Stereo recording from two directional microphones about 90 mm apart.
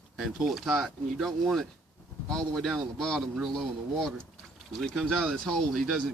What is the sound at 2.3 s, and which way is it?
Speech, 5° left (ahead or behind).